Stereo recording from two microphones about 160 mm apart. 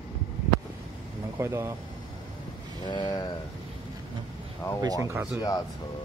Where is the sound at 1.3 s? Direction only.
15° right (ahead or behind).